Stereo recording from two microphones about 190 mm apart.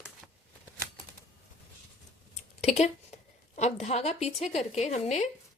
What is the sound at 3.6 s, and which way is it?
Speech, 35° left (ahead or behind).